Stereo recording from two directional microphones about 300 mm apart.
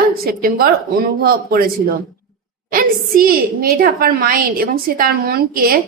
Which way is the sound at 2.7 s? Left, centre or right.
Right.